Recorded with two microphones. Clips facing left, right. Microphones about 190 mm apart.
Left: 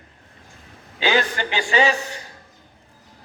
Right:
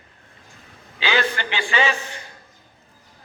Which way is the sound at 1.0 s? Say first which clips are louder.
Left 2 dB; 45° left (ahead or behind).